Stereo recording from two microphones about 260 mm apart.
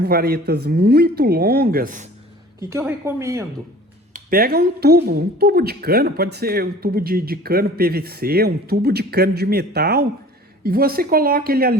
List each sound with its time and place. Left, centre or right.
0.0 s speech: right
2.6 s speech: centre
4.1 s speech: right